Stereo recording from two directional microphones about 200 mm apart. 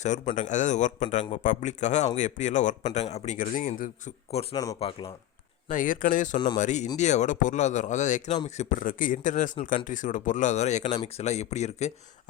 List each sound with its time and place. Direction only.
0.0 s speech: 35° left (ahead or behind)
4.5 s speech: 15° left (ahead or behind)
5.6 s speech: 40° left (ahead or behind)